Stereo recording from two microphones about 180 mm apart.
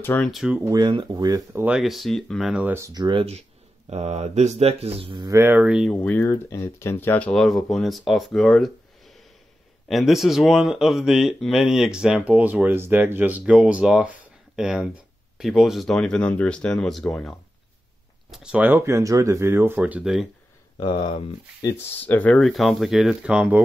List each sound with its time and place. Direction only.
0.0 s speech: 10° left (ahead or behind)
0.3 s speech: 5° right (ahead or behind)
0.7 s speech: 25° right (ahead or behind); by 5.9 s 5° right (ahead or behind)
5.9 s speech: 10° left (ahead or behind)
20.8 s speech: 30° left (ahead or behind)
22.0 s speech: 10° left (ahead or behind); by 23.6 s 10° right (ahead or behind)